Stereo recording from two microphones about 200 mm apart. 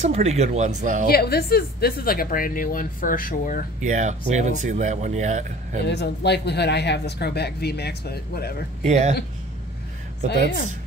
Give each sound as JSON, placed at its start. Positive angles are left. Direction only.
{"t": 0.0, "sound": "speech", "side_deg": -30}
{"t": 1.0, "sound": "speech", "side_deg": 50}
{"t": 3.8, "sound": "speech", "side_deg": -35}
{"t": 5.9, "sound": "speech", "side_deg": 55}
{"t": 8.8, "sound": "speech", "side_deg": -35}